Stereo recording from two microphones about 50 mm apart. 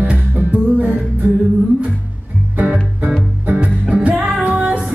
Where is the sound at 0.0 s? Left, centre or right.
Right.